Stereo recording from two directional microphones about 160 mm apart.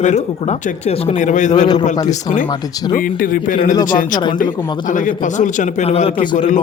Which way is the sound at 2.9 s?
60° left (ahead or behind).